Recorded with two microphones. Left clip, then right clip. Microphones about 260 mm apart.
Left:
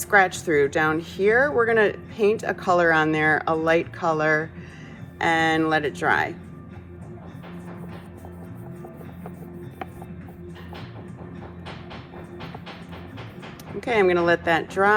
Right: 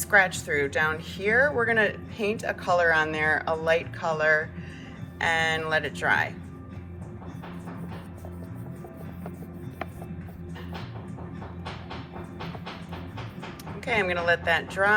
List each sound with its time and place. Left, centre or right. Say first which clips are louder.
0.1 s speech: left 3 dB; left
13.8 s speech: left 5 dB; left